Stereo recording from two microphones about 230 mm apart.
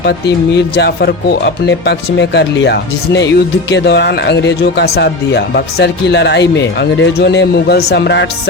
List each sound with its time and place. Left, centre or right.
0.0 s speech: left